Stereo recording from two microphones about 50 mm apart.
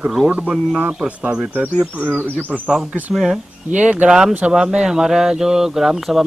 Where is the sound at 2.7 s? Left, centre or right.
Centre.